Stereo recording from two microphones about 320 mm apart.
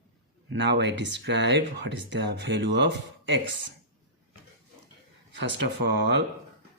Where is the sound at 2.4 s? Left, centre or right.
Right.